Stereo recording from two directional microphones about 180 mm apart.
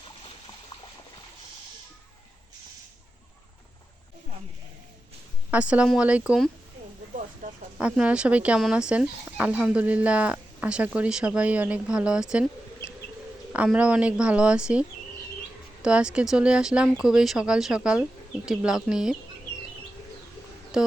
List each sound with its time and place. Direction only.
5.5 s speech: 5° right (ahead or behind)
7.8 s speech: 5° right (ahead or behind)
12.8 s bird: 15° left (ahead or behind)
13.5 s speech: 5° right (ahead or behind)
20.7 s speech: 5° right (ahead or behind)